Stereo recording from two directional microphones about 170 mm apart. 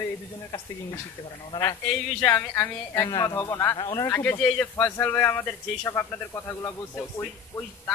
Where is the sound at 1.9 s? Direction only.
10° left (ahead or behind).